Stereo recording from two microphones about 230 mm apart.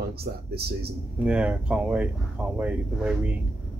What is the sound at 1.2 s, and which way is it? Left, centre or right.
Speech, centre.